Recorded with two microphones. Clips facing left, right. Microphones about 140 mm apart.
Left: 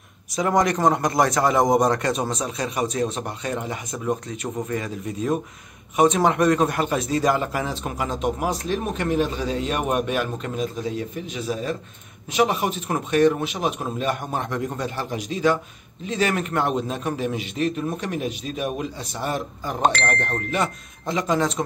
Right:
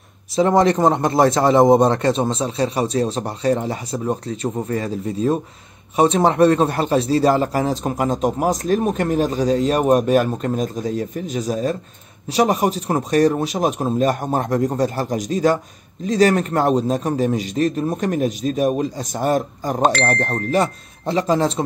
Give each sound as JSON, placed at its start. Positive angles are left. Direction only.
{"t": 0.3, "sound": "speech", "side_deg": -30}